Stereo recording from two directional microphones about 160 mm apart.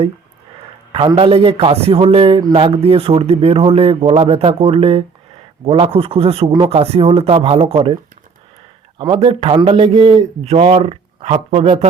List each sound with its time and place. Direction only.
0.9 s speech: 35° right (ahead or behind)
9.1 s speech: 40° right (ahead or behind)